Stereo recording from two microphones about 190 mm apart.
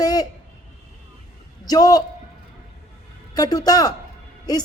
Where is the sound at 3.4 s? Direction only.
20° left (ahead or behind).